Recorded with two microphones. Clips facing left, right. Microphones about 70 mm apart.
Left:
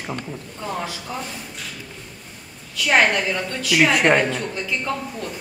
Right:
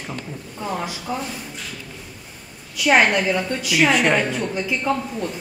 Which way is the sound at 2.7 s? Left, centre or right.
Centre.